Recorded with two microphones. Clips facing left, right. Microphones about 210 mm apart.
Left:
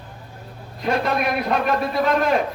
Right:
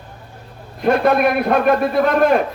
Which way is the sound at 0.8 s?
55° right (ahead or behind).